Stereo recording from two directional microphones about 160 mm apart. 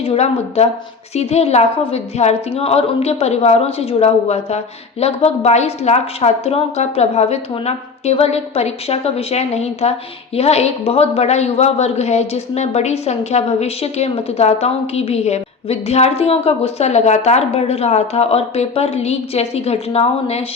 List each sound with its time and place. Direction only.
0.0 s a woman's voice: 40° left (ahead or behind)